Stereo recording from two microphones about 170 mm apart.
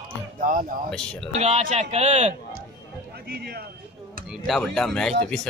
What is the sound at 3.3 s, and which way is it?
Speech, 75° right (ahead or behind).